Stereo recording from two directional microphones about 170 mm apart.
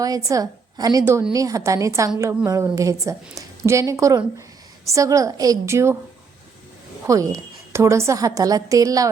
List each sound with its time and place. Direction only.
0.0 s a woman's voice: 20° right (ahead or behind)
7.1 s a woman's voice: 20° right (ahead or behind)